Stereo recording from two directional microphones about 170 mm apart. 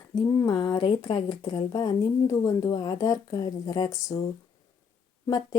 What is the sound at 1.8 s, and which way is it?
Speech, 20° left (ahead or behind).